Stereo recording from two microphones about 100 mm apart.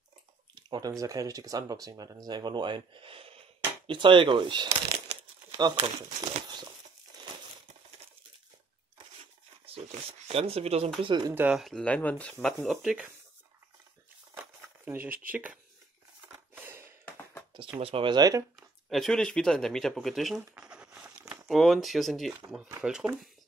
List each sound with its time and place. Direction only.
0.6 s speech: 45° right (ahead or behind)
4.6 s speech: 90° right
5.8 s speech: 65° right (ahead or behind)
9.7 s speech: 80° right
11.0 s speech: 55° right (ahead or behind)
11.5 s speech: centre (ahead or behind)
11.8 s speech: 15° left (ahead or behind); by 13.1 s 5° right (ahead or behind)
14.3 s crumpling: 20° right (ahead or behind)
16.3 s a sound: 25° right (ahead or behind)
17.7 s speech: 75° right (ahead or behind)
18.1 s speech: 40° right (ahead or behind)
18.6 s speech: centre (ahead or behind)
20.5 s a sound: 10° right (ahead or behind)
21.5 s speech: centre (ahead or behind)